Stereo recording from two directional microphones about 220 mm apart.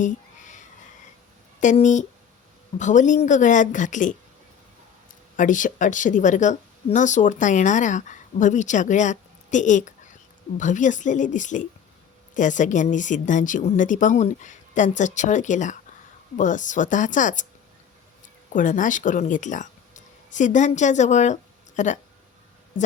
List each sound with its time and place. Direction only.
0.0 s a sound: 35° left (ahead or behind)
1.6 s speech: 35° left (ahead or behind)
5.4 s speech: 35° left (ahead or behind)
18.5 s speech: 35° left (ahead or behind)